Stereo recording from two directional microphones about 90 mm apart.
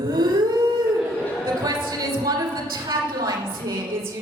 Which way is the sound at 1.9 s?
45° right (ahead or behind).